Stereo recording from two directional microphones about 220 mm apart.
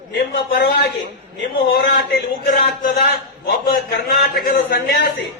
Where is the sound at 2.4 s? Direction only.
40° left (ahead or behind).